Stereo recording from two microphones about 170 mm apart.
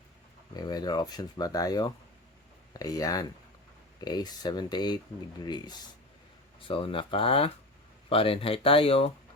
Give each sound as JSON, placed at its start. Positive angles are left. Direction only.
{"t": 0.5, "sound": "speech", "side_deg": 25}